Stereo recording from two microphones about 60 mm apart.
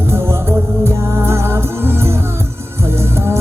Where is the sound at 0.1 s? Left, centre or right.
Right.